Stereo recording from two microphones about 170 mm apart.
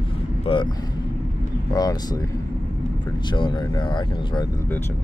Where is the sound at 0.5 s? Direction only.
35° left (ahead or behind).